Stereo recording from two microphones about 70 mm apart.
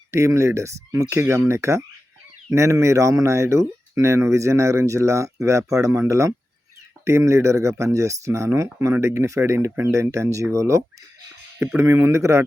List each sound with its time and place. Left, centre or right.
0.1 s speech: right